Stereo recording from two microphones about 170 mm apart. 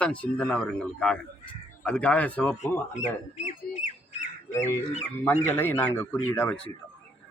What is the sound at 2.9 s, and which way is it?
Speech, 40° left (ahead or behind).